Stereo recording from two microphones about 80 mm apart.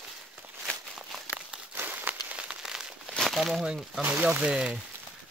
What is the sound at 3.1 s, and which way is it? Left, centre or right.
Speech, centre.